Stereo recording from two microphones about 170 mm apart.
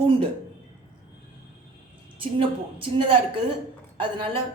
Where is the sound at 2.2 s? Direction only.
30° right (ahead or behind).